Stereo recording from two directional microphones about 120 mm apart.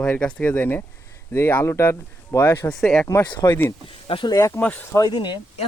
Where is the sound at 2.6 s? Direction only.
5° left (ahead or behind).